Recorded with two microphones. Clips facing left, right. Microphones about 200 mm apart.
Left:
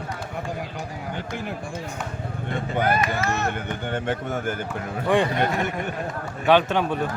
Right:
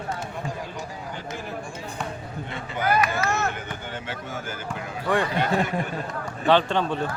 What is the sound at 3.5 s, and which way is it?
Speech, 55° left (ahead or behind).